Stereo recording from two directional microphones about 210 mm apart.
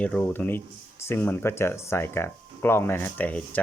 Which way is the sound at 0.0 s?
5° left (ahead or behind).